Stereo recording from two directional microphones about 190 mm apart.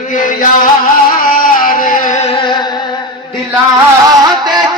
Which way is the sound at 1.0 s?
45° left (ahead or behind).